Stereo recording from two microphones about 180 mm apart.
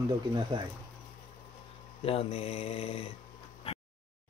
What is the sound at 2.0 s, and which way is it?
Mantra, 30° left (ahead or behind).